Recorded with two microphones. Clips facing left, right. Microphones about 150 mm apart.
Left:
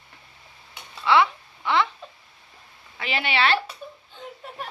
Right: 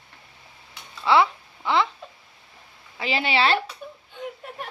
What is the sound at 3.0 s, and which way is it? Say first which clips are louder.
Speech: right 2 dB; 30° right (ahead or behind).